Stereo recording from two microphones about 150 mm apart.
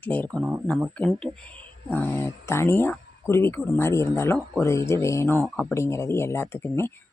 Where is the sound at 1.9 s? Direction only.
15° left (ahead or behind).